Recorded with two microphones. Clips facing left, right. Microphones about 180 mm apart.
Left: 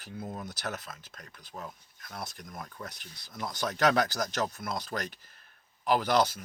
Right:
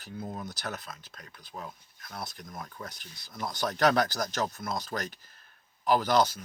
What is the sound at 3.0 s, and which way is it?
Speech, 45° right (ahead or behind).